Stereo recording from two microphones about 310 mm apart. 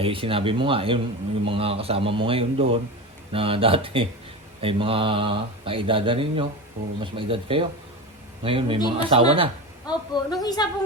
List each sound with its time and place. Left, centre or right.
0.0 s speech: centre
9.8 s a woman's voice: centre